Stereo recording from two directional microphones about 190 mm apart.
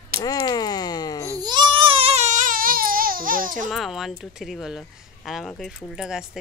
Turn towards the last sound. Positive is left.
turn(degrees=-5)  # may be behind; listen again after turning